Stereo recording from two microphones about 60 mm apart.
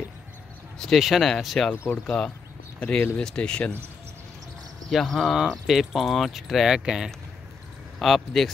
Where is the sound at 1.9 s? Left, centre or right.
Left.